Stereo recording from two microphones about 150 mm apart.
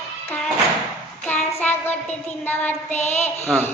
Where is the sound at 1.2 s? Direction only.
15° left (ahead or behind).